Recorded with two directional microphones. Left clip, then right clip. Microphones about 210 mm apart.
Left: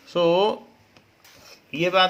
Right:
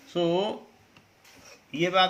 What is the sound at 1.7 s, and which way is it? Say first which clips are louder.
Speech: left 4 dB; 40° left (ahead or behind).